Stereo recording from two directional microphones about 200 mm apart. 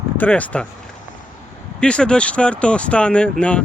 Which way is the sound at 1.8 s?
5° left (ahead or behind).